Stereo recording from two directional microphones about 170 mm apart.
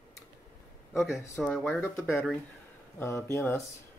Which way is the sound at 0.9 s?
5° right (ahead or behind).